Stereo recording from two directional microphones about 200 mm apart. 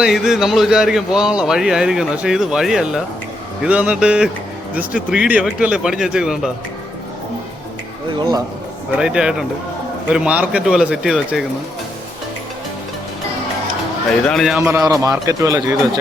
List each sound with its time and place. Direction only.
0.0 s speech: 5° right (ahead or behind)
9.0 s speech: 5° right (ahead or behind)
14.3 s speech: centre (ahead or behind)
14.6 s a man's voice: 15° right (ahead or behind)